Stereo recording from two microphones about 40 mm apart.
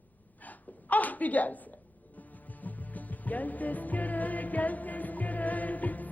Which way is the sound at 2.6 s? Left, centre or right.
Left.